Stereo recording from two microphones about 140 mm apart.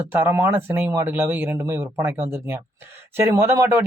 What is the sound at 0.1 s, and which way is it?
Speech, 15° right (ahead or behind).